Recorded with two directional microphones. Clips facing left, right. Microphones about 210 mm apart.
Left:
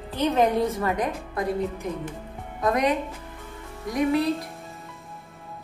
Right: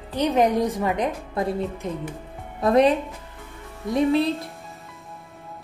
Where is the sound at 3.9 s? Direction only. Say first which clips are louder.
Right 3 dB; 30° right (ahead or behind).